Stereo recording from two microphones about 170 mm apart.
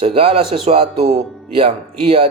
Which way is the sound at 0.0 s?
35° right (ahead or behind).